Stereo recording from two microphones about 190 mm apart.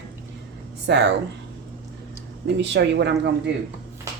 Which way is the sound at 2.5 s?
65° right (ahead or behind).